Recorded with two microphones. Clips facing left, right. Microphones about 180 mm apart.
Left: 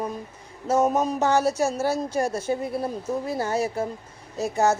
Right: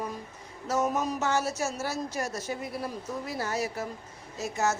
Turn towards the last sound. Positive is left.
turn(degrees=35)  # may be behind; listen again after turning